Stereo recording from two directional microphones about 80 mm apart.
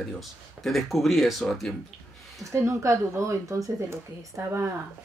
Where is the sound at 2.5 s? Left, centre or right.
Right.